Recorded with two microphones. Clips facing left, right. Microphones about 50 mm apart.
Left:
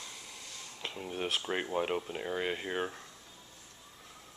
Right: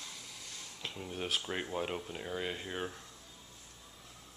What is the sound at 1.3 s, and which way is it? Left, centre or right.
Speech, centre.